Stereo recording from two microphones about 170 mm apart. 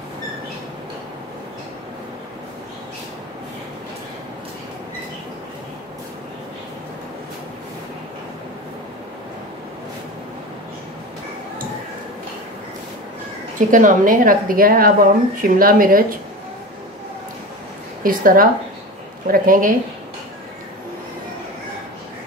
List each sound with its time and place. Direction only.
13.6 s speech: 50° right (ahead or behind)
18.0 s speech: 55° right (ahead or behind)